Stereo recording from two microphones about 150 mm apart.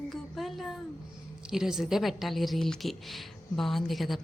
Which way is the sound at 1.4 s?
5° right (ahead or behind).